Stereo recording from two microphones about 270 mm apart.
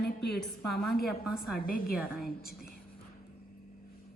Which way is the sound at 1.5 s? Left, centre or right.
Left.